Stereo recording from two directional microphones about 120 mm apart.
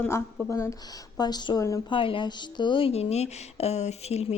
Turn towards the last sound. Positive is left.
turn(degrees=60)  # may be behind; listen again after turning